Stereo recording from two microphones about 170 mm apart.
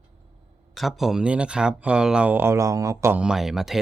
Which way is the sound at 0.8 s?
Centre (ahead or behind).